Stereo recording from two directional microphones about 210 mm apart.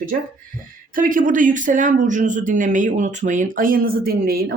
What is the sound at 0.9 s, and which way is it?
Speech, 40° right (ahead or behind).